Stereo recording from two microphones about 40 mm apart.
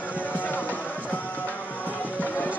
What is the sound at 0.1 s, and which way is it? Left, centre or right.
Music, left.